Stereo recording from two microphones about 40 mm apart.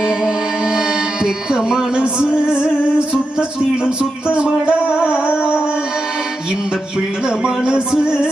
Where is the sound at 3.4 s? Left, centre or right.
Right.